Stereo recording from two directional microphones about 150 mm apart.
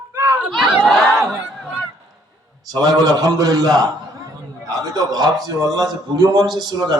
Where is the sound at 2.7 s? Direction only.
25° right (ahead or behind).